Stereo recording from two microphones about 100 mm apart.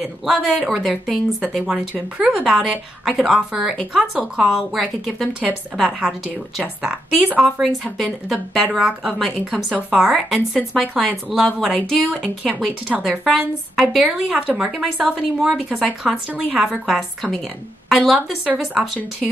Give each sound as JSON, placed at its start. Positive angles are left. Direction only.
{"t": 0.0, "sound": "a woman's voice", "side_deg": 0}
{"t": 1.6, "sound": "a woman's voice", "side_deg": -10}
{"t": 5.9, "sound": "a woman's voice", "side_deg": -15}
{"t": 8.0, "sound": "a woman's voice", "side_deg": 0}
{"t": 11.7, "sound": "a woman's voice", "side_deg": -10}
{"t": 14.8, "sound": "a woman's voice", "side_deg": 0}